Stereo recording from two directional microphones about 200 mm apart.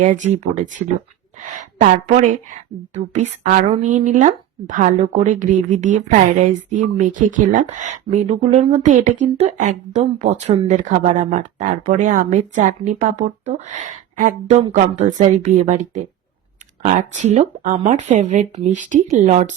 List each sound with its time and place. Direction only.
0.0 s speech: 40° right (ahead or behind)